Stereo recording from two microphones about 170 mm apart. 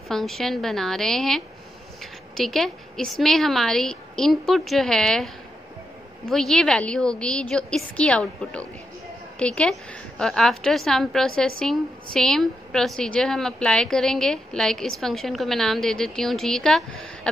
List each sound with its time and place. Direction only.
0.1 s a woman's voice: centre (ahead or behind)